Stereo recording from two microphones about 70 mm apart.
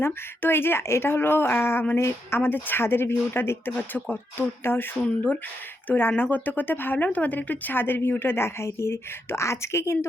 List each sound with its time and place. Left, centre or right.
0.0 s speech: left